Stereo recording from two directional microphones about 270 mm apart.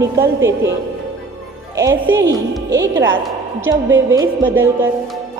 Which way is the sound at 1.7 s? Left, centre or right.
Centre.